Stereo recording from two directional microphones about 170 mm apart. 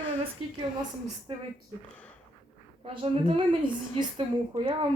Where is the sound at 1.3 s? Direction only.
35° right (ahead or behind).